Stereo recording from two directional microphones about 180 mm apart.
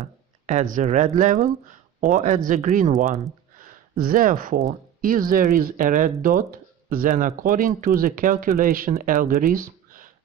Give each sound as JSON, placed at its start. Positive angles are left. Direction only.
{"t": 0.0, "sound": "speech", "side_deg": -40}
{"t": 3.5, "sound": "speech", "side_deg": -50}